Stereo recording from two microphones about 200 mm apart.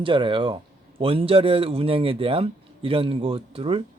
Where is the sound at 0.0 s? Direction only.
25° right (ahead or behind).